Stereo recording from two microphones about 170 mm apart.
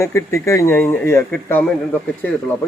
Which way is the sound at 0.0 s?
15° left (ahead or behind).